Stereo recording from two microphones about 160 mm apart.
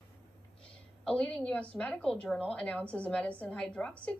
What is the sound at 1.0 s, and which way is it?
A woman's voice, 5° left (ahead or behind).